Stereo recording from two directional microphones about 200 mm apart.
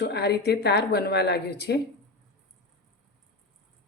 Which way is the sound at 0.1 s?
55° left (ahead or behind).